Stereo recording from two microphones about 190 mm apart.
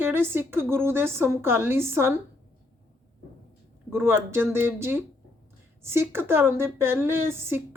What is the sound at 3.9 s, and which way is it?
A woman's voice, 10° right (ahead or behind).